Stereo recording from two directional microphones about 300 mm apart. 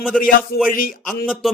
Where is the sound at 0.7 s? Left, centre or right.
Left.